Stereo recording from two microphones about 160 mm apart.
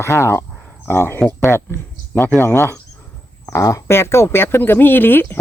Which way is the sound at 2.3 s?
15° left (ahead or behind).